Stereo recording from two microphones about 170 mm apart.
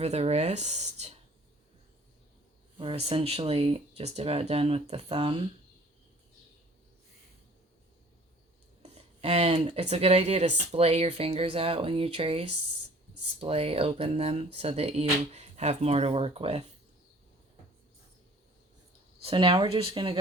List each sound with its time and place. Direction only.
0.0 s speech: 40° right (ahead or behind)
2.7 s speech: 30° right (ahead or behind)
8.8 s speech: 40° right (ahead or behind)
19.2 s speech: 30° right (ahead or behind)